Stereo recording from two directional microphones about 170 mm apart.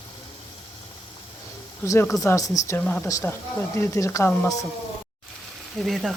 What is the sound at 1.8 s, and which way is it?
Speech, 15° left (ahead or behind).